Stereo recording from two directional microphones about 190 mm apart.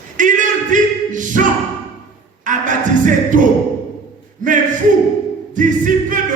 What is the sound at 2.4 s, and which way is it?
Music, 45° right (ahead or behind).